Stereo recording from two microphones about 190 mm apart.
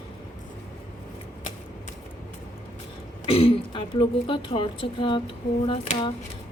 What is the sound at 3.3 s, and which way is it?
A woman's voice, 30° left (ahead or behind).